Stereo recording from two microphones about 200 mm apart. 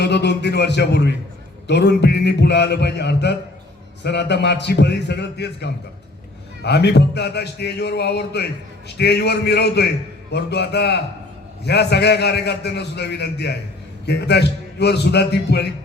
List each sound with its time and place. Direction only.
0.0 s a man's voice: 60° left (ahead or behind)